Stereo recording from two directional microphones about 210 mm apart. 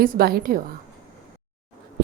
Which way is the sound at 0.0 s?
45° right (ahead or behind).